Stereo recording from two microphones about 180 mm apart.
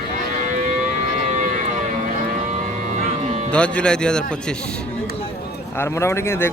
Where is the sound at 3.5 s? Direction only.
5° left (ahead or behind).